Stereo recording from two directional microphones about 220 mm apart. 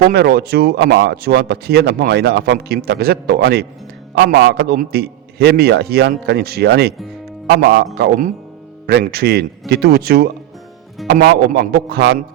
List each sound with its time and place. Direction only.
0.0 s speech: 45° right (ahead or behind)